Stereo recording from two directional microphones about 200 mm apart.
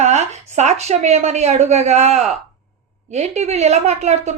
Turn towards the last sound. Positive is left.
turn(degrees=-35)  # may be behind; listen again after turning